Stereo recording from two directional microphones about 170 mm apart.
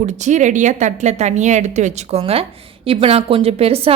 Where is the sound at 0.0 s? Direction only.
45° right (ahead or behind).